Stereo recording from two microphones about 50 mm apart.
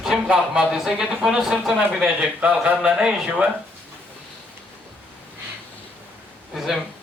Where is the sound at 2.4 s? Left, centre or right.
Right.